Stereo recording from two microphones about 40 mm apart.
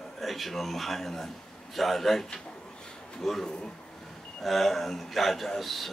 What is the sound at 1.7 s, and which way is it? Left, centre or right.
Speech, centre.